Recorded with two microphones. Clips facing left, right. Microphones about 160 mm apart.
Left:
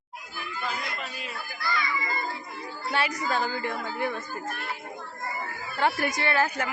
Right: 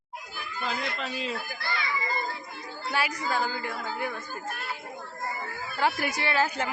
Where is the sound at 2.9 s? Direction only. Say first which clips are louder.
Left 1 dB; 5° right (ahead or behind).